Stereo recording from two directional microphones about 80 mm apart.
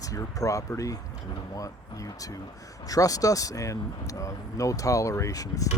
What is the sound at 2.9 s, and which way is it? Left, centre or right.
Speech, left.